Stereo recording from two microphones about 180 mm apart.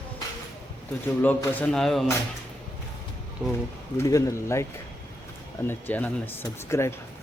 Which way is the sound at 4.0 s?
15° left (ahead or behind).